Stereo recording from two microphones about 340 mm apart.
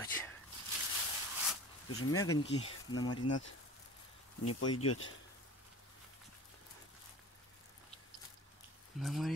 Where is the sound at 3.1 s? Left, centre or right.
Left.